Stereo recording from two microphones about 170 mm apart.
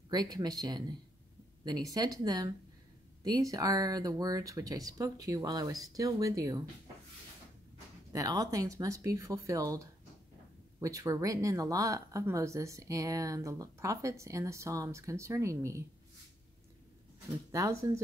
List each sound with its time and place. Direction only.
0.1 s speech: 25° right (ahead or behind)
8.1 s speech: 20° right (ahead or behind)
17.5 s speech: 20° right (ahead or behind)